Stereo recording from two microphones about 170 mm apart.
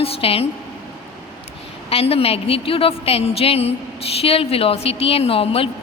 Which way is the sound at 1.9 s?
35° left (ahead or behind).